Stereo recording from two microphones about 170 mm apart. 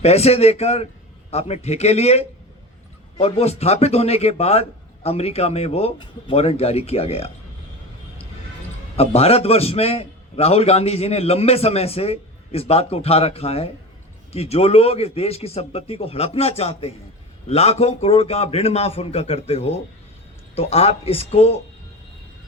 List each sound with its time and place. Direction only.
0.0 s a man's voice: 40° left (ahead or behind)
9.0 s a man's voice: 35° left (ahead or behind)